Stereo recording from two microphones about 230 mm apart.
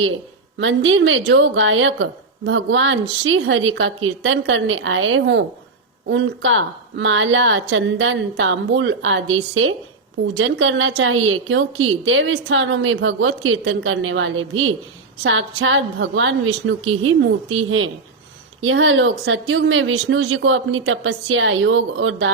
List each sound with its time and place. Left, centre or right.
0.6 s a woman's voice: right